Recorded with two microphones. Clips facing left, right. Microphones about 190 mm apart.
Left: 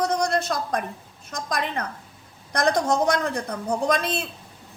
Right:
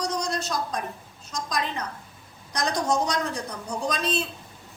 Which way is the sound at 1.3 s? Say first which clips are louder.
Left 1 dB; 55° left (ahead or behind).